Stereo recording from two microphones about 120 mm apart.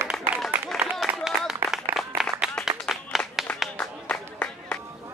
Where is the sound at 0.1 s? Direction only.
5° left (ahead or behind).